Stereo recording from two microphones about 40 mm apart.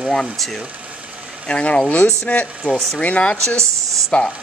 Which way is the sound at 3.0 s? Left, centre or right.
Left.